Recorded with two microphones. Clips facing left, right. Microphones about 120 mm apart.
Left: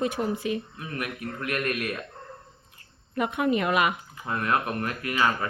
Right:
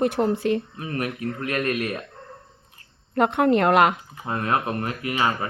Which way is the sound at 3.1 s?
80° right.